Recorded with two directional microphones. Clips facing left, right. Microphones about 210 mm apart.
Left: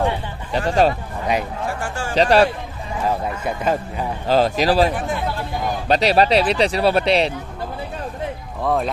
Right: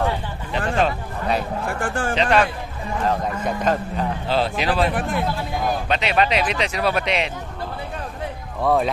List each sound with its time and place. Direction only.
0.5 s speech: 35° left (ahead or behind)
1.7 s speech: 55° right (ahead or behind)
2.1 s speech: 35° left (ahead or behind)
3.1 s a man's voice: 10° left (ahead or behind)
4.3 s speech: 40° left (ahead or behind)
4.9 s speech: 60° right (ahead or behind)
5.9 s speech: 35° left (ahead or behind)
8.6 s speech: centre (ahead or behind)